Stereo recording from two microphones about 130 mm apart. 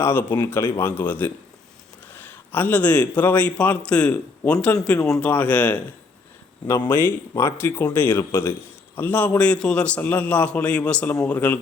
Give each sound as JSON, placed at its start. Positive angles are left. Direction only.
{"t": 0.0, "sound": "a man's voice", "side_deg": 15}
{"t": 6.7, "sound": "speech", "side_deg": 30}
{"t": 6.9, "sound": "a man's voice", "side_deg": 20}